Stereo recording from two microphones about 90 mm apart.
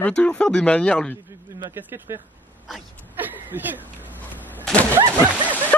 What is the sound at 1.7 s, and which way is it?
Speech, 30° right (ahead or behind).